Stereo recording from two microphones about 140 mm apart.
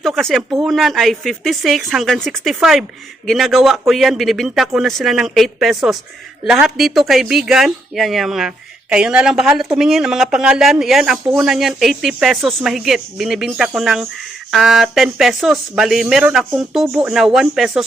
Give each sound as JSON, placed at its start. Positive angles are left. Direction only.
{"t": 0.0, "sound": "speech", "side_deg": 5}